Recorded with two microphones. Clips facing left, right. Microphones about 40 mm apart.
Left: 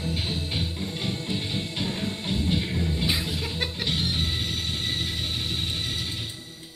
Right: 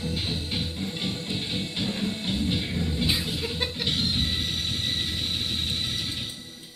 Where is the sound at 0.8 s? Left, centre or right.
Right.